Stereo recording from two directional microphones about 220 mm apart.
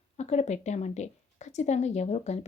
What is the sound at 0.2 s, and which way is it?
A woman's voice, 30° left (ahead or behind).